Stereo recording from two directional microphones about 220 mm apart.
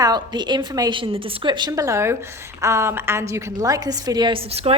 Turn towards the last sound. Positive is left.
turn(degrees=-25)  # may be behind; listen again after turning